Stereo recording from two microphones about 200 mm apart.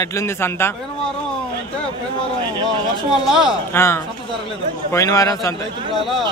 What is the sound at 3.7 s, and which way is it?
Speech, 15° left (ahead or behind).